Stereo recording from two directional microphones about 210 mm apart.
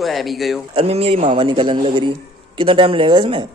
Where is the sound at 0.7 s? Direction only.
25° right (ahead or behind).